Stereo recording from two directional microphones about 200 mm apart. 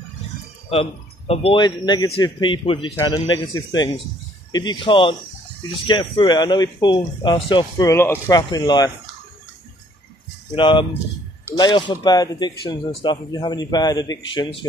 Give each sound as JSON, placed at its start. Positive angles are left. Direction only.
{"t": 0.7, "sound": "speech", "side_deg": 30}
{"t": 10.5, "sound": "speech", "side_deg": 25}